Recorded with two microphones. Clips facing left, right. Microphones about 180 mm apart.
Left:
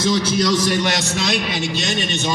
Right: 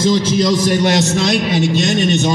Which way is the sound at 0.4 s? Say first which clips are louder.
Right 3 dB; 20° right (ahead or behind).